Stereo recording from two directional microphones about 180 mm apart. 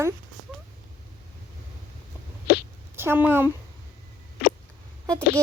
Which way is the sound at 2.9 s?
10° right (ahead or behind).